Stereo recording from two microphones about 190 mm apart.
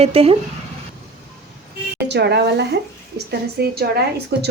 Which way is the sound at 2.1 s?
60° right (ahead or behind).